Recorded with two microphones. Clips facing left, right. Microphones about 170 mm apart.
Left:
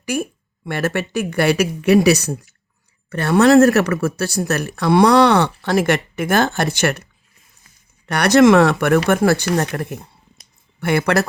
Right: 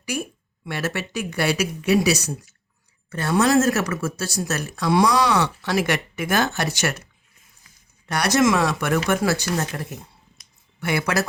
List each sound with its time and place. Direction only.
0.0 s speech: 50° left (ahead or behind)